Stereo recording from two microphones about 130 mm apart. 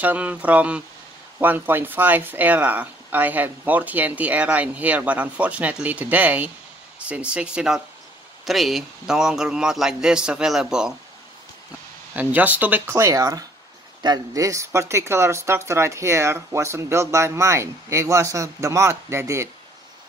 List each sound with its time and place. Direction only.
0.0 s a man's voice: 10° right (ahead or behind)
12.2 s speech: 10° right (ahead or behind)